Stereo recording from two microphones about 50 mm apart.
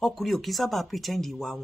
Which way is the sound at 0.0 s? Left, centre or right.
Centre.